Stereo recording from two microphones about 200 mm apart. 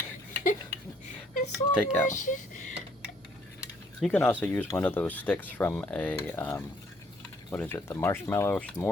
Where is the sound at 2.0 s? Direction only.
40° left (ahead or behind).